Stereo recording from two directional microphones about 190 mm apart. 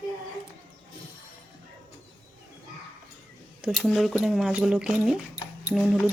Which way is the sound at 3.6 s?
Centre (ahead or behind).